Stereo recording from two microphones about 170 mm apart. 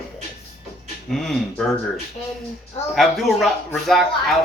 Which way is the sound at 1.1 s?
Centre (ahead or behind).